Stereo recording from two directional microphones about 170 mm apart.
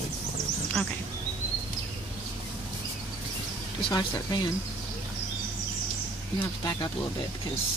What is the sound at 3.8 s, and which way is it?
Speech, 25° left (ahead or behind).